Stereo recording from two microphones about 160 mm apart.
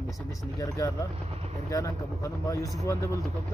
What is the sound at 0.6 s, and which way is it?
Speech, 20° left (ahead or behind).